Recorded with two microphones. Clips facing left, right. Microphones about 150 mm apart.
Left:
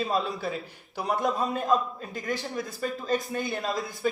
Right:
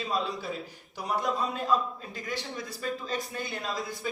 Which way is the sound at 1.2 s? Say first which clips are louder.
Left 2 dB; 50° left (ahead or behind).